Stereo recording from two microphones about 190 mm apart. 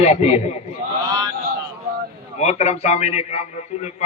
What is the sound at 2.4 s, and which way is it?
Speech, 35° left (ahead or behind).